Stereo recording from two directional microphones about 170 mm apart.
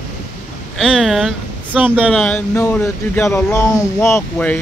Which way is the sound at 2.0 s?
10° left (ahead or behind).